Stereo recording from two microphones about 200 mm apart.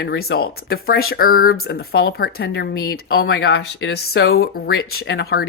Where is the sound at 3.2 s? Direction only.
90° left.